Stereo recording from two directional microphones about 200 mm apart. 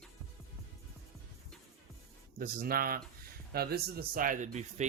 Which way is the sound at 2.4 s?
45° right (ahead or behind).